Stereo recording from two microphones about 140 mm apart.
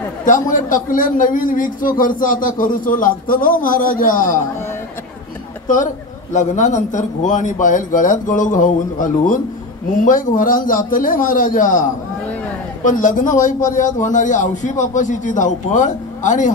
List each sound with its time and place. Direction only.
0.2 s a man's voice: 65° left (ahead or behind)
6.3 s a man's voice: 60° left (ahead or behind)